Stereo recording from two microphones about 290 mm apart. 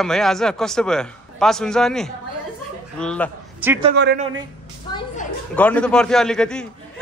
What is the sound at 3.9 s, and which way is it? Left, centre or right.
Speech, right.